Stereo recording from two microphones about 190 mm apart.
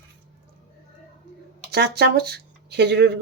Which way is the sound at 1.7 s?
60° right (ahead or behind).